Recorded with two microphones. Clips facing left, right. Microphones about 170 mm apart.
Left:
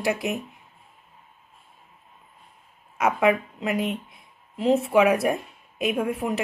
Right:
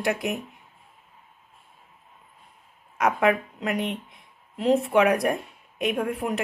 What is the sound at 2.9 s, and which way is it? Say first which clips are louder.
Speech: left 1 dB; centre (ahead or behind).